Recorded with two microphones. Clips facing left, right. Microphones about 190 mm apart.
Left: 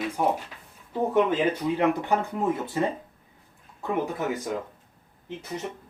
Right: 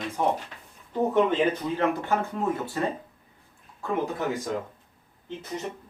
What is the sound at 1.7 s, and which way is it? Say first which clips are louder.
Speech: left 2 dB; 15° left (ahead or behind).